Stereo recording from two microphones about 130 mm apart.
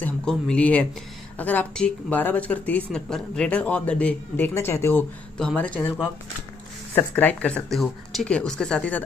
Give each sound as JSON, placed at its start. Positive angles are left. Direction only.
{"t": 0.0, "sound": "speech", "side_deg": 5}
{"t": 4.6, "sound": "speech", "side_deg": 20}
{"t": 5.4, "sound": "speech", "side_deg": 10}
{"t": 7.0, "sound": "speech", "side_deg": 15}